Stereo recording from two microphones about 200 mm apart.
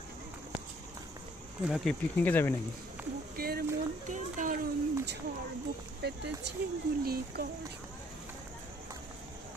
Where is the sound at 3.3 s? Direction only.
50° right (ahead or behind).